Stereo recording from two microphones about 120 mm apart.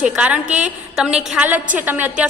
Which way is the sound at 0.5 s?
90° right.